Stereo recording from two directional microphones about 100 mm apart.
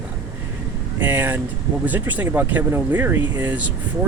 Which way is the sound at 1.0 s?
20° right (ahead or behind).